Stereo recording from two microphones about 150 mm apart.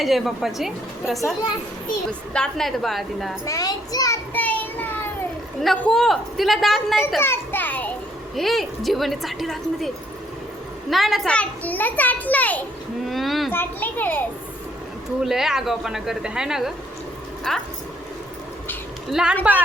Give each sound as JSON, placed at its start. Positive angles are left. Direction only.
{"t": 0.0, "sound": "a woman's voice", "side_deg": 0}
{"t": 3.4, "sound": "a child's voice", "side_deg": 25}
{"t": 4.4, "sound": "child singing", "side_deg": 10}
{"t": 5.6, "sound": "a woman's voice", "side_deg": 5}
{"t": 7.2, "sound": "a child's voice", "side_deg": 15}
{"t": 8.4, "sound": "a woman's voice", "side_deg": 0}
{"t": 13.1, "sound": "a child's voice", "side_deg": 0}
{"t": 13.5, "sound": "a child's voice", "side_deg": 15}
{"t": 15.2, "sound": "a woman's voice", "side_deg": 0}
{"t": 19.1, "sound": "a woman's voice", "side_deg": -5}